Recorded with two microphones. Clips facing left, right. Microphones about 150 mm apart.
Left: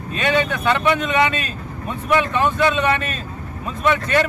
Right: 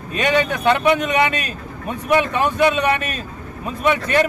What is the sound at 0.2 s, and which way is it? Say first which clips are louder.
A man's voice: right 1 dB; 15° right (ahead or behind).